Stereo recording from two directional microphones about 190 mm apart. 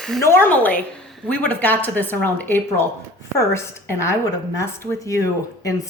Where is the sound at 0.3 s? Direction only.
10° left (ahead or behind).